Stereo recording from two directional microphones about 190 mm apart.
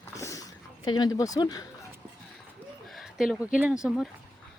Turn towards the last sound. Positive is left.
turn(degrees=-5)  # may be behind; listen again after turning